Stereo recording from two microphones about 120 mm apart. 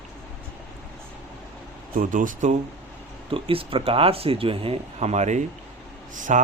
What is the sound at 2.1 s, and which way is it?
Speech, 90° right.